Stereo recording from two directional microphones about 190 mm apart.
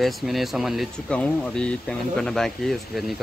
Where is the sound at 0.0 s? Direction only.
Centre (ahead or behind).